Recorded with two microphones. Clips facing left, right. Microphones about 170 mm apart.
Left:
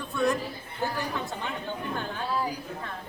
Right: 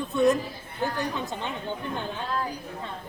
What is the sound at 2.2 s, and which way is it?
Speech, 10° left (ahead or behind).